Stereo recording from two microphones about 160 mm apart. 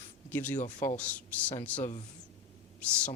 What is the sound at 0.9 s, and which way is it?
Speech, 10° left (ahead or behind).